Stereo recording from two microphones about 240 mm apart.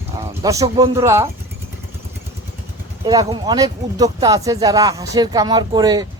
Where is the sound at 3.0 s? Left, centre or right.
Centre.